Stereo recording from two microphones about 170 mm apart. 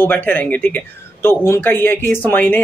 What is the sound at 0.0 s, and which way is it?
Speech, 10° left (ahead or behind).